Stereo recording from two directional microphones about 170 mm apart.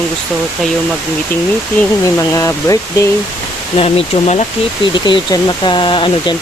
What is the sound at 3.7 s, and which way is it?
Speech, 35° left (ahead or behind).